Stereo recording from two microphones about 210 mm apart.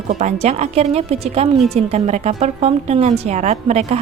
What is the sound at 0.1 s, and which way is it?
A woman's voice, 35° right (ahead or behind).